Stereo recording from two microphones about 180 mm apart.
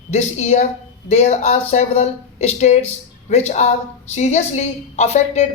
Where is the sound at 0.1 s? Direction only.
35° left (ahead or behind).